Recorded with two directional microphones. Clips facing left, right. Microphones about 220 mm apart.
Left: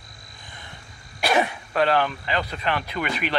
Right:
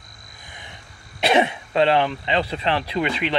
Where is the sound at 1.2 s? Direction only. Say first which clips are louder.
Right 3 dB; 25° right (ahead or behind).